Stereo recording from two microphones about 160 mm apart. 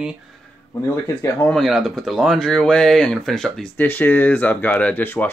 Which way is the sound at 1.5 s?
Centre (ahead or behind).